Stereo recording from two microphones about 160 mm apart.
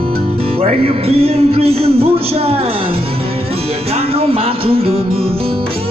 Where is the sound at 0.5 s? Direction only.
40° right (ahead or behind).